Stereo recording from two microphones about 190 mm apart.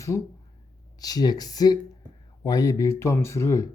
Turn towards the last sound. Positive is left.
turn(degrees=15)  # may be behind; listen again after turning